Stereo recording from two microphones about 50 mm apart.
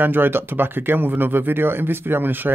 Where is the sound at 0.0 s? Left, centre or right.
Right.